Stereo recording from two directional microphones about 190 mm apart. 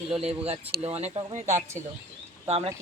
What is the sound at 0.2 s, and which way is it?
Speech, 30° right (ahead or behind).